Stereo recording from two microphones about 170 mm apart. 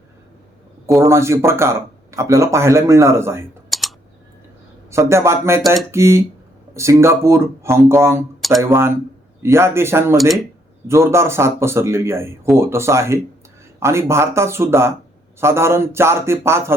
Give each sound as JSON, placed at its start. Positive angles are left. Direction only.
{"t": 0.9, "sound": "speech", "side_deg": -15}
{"t": 3.7, "sound": "typing", "side_deg": 0}
{"t": 4.9, "sound": "speech", "side_deg": -15}
{"t": 8.4, "sound": "speech", "side_deg": 0}
{"t": 9.4, "sound": "speech", "side_deg": -15}